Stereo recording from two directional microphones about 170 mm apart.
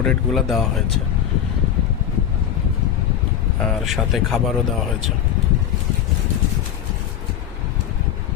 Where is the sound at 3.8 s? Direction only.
Centre (ahead or behind).